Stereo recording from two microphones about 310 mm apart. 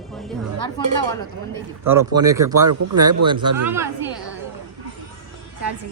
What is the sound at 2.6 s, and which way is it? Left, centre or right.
Speech, right.